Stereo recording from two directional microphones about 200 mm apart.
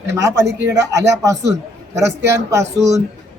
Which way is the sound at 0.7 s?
15° right (ahead or behind).